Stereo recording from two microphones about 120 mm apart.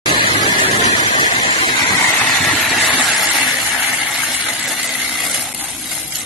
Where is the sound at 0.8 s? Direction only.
50° left (ahead or behind).